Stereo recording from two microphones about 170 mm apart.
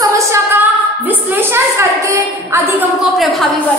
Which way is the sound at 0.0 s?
20° right (ahead or behind).